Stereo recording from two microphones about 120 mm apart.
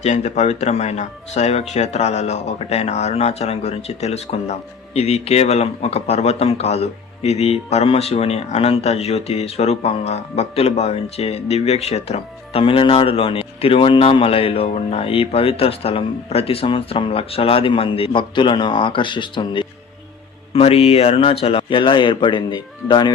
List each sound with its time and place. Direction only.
0.0 s a man's voice: 75° left (ahead or behind); by 19.6 s 40° left (ahead or behind)
20.5 s speech: 55° left (ahead or behind); by 23.1 s 35° left (ahead or behind)